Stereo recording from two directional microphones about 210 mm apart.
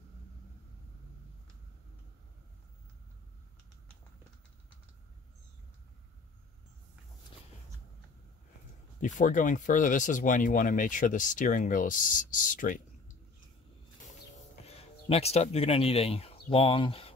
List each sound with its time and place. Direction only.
9.0 s speech: 35° left (ahead or behind)
14.7 s speech: 30° left (ahead or behind)